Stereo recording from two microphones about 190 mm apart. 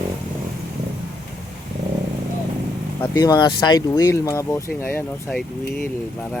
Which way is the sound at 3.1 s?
20° left (ahead or behind).